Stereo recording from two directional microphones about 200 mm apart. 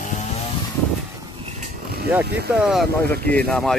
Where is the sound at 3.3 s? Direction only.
5° left (ahead or behind).